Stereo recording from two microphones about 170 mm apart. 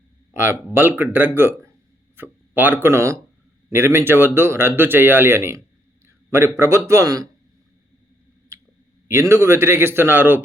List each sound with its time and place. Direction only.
0.3 s speech: 15° right (ahead or behind)
9.3 s speech: 15° right (ahead or behind)